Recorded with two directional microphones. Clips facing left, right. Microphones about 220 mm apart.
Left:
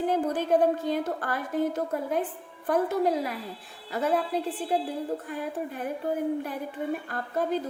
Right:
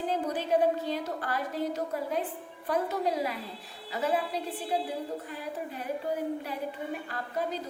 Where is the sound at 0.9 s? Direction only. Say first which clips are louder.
Left 4 dB; 50° left (ahead or behind).